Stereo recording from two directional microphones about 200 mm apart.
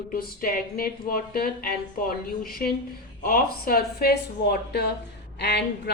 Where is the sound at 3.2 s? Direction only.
45° left (ahead or behind).